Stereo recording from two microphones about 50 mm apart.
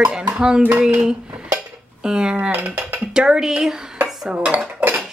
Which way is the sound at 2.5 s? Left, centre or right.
Right.